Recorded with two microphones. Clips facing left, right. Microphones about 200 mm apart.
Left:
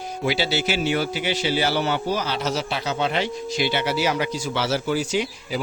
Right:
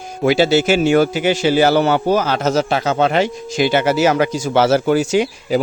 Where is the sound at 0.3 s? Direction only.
50° right (ahead or behind).